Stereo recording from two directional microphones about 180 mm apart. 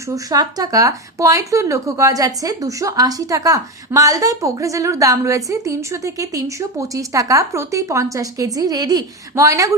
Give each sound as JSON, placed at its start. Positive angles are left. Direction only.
{"t": 0.1, "sound": "speech", "side_deg": -20}